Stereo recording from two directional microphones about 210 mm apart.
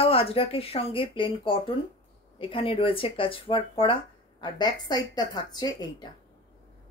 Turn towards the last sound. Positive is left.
turn(degrees=20)  # may be behind; listen again after turning